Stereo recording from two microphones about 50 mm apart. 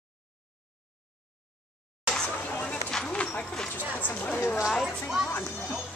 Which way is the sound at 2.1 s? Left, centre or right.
Left.